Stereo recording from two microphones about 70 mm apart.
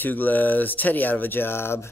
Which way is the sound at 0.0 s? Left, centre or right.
Left.